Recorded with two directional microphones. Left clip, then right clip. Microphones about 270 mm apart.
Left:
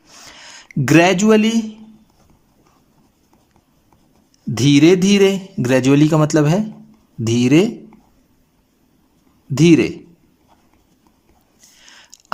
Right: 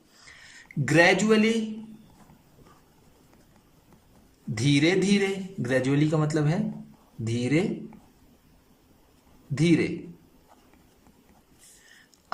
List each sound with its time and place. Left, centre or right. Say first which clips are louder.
0.3 s speech: left 7 dB; left
4.5 s a man's voice: left 11 dB; left
9.6 s a man's voice: left 11 dB; left
12.1 s a sound: left 14 dB; left